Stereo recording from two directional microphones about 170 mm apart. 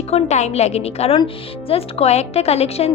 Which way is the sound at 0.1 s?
40° left (ahead or behind).